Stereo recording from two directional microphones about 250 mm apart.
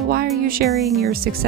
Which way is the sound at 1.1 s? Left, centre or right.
Right.